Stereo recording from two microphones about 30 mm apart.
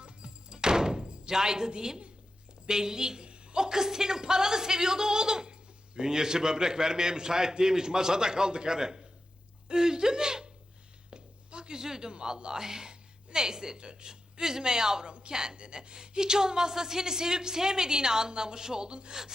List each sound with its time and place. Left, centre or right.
0.0 s music: right
1.3 s speech: right
11.1 s a sound: right
11.8 s speech: centre